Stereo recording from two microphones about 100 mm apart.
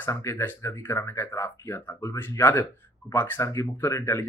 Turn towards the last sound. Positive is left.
turn(degrees=30)  # may be behind; listen again after turning